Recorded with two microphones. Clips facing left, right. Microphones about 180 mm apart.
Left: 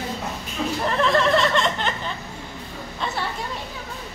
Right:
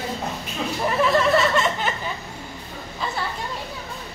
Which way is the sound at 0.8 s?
5° right (ahead or behind).